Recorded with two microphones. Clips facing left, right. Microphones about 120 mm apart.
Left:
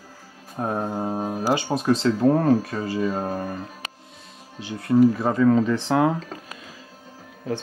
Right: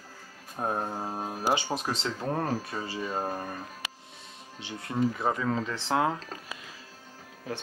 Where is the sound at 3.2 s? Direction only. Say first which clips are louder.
Left 6 dB; 10° left (ahead or behind).